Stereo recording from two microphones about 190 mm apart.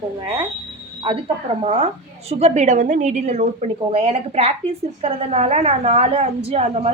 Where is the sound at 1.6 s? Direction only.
35° right (ahead or behind).